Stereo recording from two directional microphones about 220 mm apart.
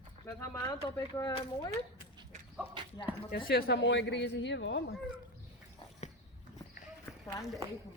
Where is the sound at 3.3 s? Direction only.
45° left (ahead or behind).